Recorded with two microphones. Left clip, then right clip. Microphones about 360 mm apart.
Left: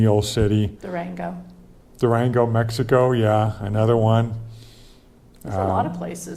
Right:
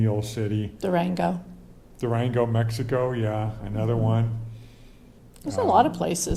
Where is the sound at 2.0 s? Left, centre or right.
Left.